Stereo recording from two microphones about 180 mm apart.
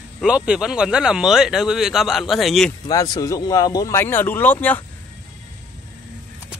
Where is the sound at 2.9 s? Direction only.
20° left (ahead or behind).